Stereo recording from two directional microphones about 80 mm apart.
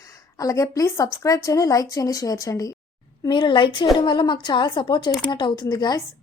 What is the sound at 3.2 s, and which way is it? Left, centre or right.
Speech, left.